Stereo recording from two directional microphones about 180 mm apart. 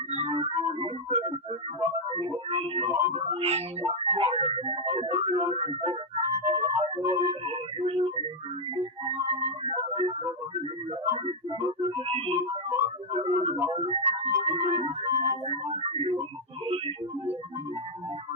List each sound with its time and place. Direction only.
0.1 s music: 35° right (ahead or behind)
2.1 s a sound: 30° right (ahead or behind)
3.2 s music: 30° right (ahead or behind)
11.9 s music: 30° right (ahead or behind)
12.4 s music: 15° right (ahead or behind)
13.1 s music: 40° right (ahead or behind)